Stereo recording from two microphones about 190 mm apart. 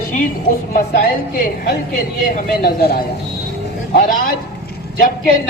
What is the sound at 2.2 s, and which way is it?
A man's voice, 55° left (ahead or behind).